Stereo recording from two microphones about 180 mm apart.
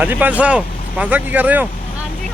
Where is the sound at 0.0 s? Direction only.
10° right (ahead or behind).